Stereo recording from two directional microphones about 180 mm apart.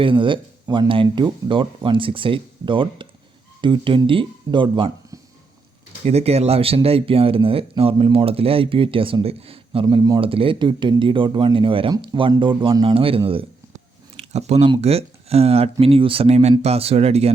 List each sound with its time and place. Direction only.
0.0 s speech: 30° right (ahead or behind)